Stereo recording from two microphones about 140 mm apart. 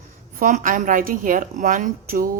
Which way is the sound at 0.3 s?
75° right (ahead or behind).